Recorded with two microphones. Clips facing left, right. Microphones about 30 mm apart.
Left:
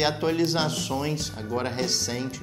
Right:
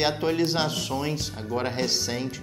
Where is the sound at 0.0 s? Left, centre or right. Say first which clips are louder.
Even; centre.